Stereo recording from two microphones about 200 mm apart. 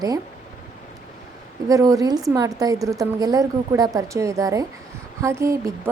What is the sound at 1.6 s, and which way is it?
A woman's voice, 15° right (ahead or behind).